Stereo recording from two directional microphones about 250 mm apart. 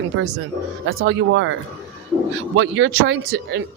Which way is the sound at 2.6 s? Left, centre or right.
Right.